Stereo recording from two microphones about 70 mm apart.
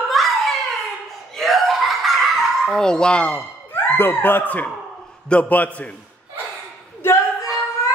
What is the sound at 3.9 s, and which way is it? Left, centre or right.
Speech, left.